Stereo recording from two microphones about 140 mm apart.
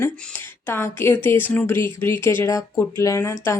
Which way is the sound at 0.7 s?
15° left (ahead or behind).